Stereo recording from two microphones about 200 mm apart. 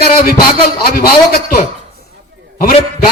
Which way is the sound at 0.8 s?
50° left (ahead or behind).